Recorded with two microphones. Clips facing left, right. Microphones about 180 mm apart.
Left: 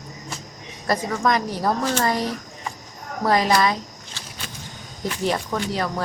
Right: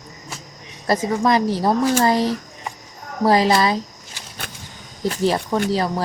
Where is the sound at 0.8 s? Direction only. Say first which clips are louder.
Right 3 dB; 30° right (ahead or behind).